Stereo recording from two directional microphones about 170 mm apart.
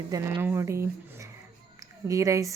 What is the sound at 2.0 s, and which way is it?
Speech, 20° right (ahead or behind).